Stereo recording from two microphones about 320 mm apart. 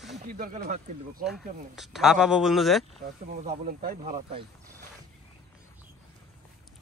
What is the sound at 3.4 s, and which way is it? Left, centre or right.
Speech, right.